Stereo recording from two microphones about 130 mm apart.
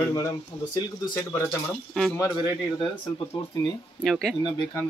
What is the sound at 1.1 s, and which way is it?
Speech, 15° left (ahead or behind).